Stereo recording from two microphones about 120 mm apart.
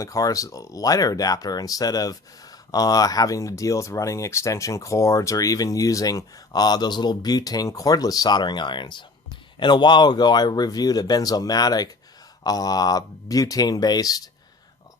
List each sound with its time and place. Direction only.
0.0 s speech: 30° left (ahead or behind)